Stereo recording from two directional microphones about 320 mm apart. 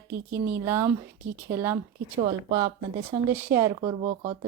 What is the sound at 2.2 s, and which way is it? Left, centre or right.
Speech, centre.